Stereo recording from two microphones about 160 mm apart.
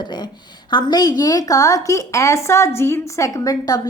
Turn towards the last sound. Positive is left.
turn(degrees=20)  # may be behind; listen again after turning